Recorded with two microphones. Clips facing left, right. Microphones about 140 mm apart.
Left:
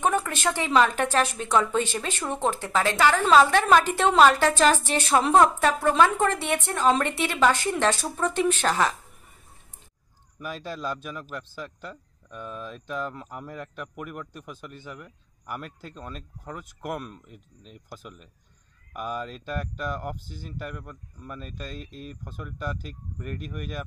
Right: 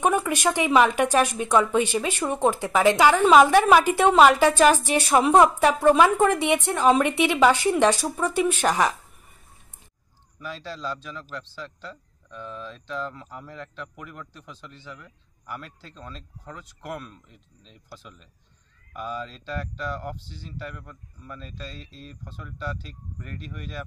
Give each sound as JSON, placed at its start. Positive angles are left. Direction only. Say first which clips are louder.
{"t": 0.0, "sound": "speech", "louder": "right 3 dB", "side_deg": -10}
{"t": 10.4, "sound": "speech", "louder": "left 1 dB", "side_deg": 15}
{"t": 20.2, "sound": "speech", "louder": "left 2 dB", "side_deg": 50}
{"t": 20.6, "sound": "speech", "louder": "left 1 dB", "side_deg": 10}
{"t": 21.6, "sound": "speech", "louder": "left 3 dB", "side_deg": 50}
{"t": 22.0, "sound": "speech", "louder": "left 3 dB", "side_deg": 10}